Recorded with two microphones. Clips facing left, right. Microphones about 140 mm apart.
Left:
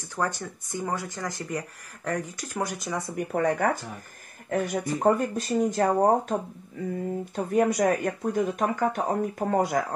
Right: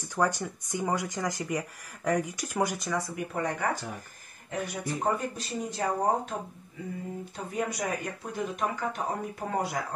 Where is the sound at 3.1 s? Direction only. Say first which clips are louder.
Left 6 dB; 50° left (ahead or behind).